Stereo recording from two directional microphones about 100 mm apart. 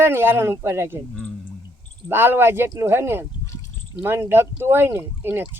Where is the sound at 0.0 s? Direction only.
25° right (ahead or behind).